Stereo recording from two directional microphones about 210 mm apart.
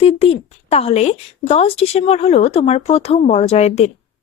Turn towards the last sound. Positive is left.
turn(degrees=30)  # may be behind; listen again after turning